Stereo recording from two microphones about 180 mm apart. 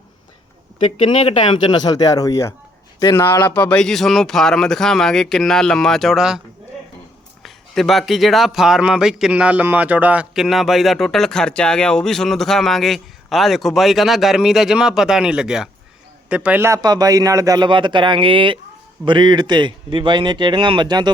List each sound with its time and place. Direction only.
0.9 s a man's voice: 35° left (ahead or behind); by 6.4 s 5° right (ahead or behind)
7.4 s a man's voice: centre (ahead or behind); by 21.1 s 25° right (ahead or behind)